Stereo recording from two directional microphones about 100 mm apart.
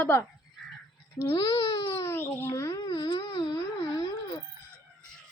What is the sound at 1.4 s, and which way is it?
Speech, 35° left (ahead or behind).